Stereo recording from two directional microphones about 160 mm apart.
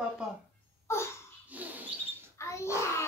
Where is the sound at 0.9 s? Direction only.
15° left (ahead or behind).